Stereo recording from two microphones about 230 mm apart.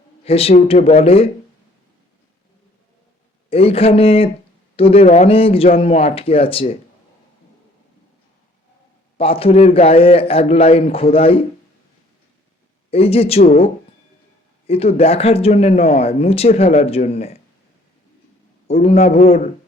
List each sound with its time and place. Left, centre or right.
0.3 s speech: left
3.5 s speech: left
9.1 s speech: left
12.9 s speech: left
14.7 s speech: left
18.7 s speech: left